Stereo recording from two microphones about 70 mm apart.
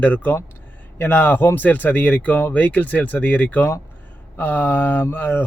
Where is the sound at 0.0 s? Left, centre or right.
Left.